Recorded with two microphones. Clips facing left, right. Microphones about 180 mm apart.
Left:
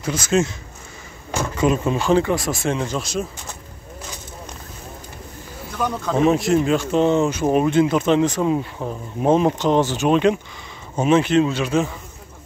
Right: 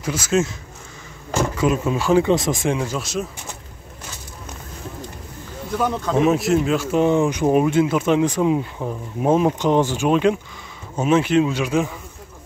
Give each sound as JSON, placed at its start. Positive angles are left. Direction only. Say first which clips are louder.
{"t": 0.0, "sound": "speech", "louder": "left 1 dB", "side_deg": -5}
{"t": 1.6, "sound": "speech", "louder": "left 3 dB", "side_deg": -5}
{"t": 6.0, "sound": "speech", "louder": "left 1 dB", "side_deg": -5}